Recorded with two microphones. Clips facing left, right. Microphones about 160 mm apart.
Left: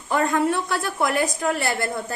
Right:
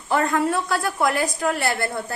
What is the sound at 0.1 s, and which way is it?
A woman's voice, 20° left (ahead or behind).